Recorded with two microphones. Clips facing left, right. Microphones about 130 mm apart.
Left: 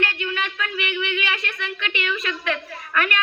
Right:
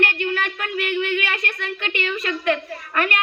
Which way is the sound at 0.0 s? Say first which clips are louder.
Right 4 dB; 45° right (ahead or behind).